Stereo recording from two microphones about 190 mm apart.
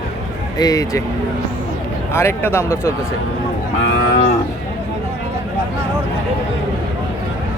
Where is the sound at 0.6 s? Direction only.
20° left (ahead or behind).